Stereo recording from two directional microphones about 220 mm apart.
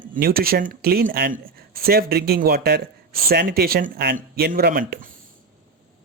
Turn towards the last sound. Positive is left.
turn(degrees=-40)  # may be behind; listen again after turning